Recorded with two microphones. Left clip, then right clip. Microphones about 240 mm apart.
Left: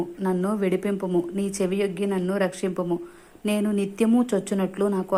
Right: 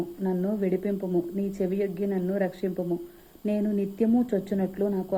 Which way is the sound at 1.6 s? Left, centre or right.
Left.